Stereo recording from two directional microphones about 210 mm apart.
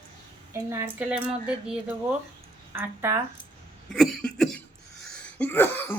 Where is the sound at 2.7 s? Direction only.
10° right (ahead or behind).